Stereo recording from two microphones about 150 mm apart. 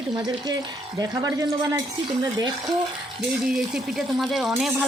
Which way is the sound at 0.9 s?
25° right (ahead or behind).